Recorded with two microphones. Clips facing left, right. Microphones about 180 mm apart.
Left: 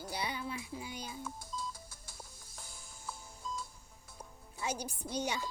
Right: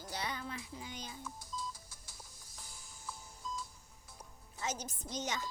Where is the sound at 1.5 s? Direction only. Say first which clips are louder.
Left 1 dB; 55° left (ahead or behind).